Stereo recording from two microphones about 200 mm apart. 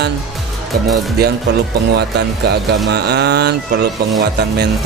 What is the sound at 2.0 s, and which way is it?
Speech, 55° right (ahead or behind).